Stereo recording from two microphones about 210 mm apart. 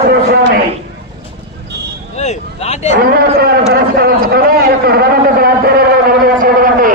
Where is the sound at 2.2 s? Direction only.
35° left (ahead or behind).